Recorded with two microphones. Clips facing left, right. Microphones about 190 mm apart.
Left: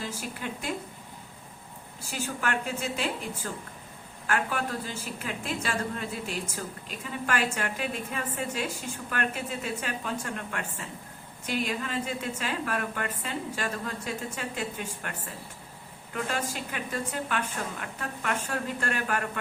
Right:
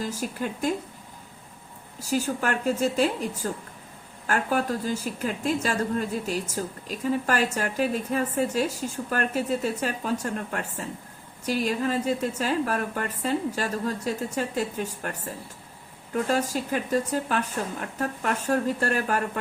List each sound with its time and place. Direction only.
0.0 s speech: 40° right (ahead or behind)
2.0 s speech: 40° right (ahead or behind)
16.1 s speech: 40° right (ahead or behind)